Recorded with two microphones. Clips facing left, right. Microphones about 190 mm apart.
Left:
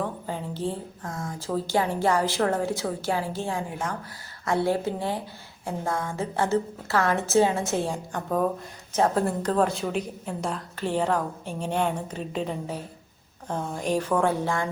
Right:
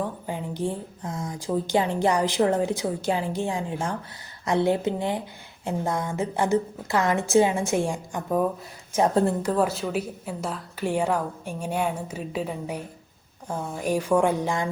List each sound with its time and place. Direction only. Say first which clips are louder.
0.3 s a woman's voice: right 1 dB; 15° right (ahead or behind)